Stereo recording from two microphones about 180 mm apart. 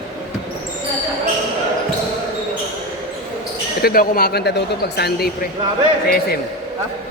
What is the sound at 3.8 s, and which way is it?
Speech, 55° left (ahead or behind).